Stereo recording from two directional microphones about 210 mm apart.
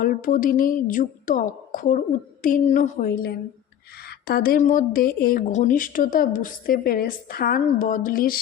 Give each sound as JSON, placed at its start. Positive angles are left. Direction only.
{"t": 0.0, "sound": "a woman's voice", "side_deg": 40}